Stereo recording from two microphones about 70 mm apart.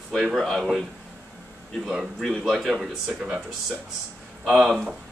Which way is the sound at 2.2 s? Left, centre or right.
Centre.